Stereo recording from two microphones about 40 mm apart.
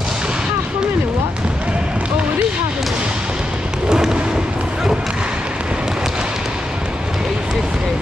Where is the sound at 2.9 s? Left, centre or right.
Right.